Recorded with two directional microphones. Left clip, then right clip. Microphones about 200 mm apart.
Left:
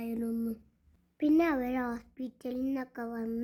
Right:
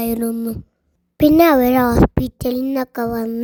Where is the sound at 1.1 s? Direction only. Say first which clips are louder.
Right 16 dB; 45° right (ahead or behind).